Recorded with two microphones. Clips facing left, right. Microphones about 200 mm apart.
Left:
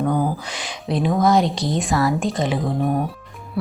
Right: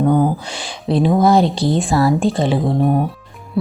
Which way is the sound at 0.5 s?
30° right (ahead or behind).